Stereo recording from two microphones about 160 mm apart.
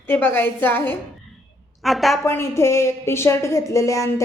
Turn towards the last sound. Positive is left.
turn(degrees=20)  # may be behind; listen again after turning